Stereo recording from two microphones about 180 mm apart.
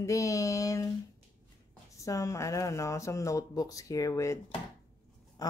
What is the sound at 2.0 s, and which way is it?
Speech, 15° left (ahead or behind).